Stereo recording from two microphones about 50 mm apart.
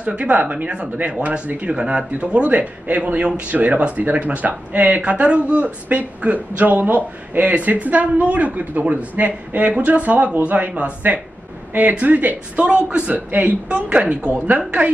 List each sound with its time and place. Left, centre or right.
0.0 s speech: right
11.7 s speech: right
12.6 s speech: right
13.7 s speech: right